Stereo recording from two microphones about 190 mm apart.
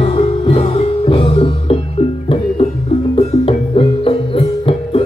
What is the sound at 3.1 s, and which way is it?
Music, 30° left (ahead or behind).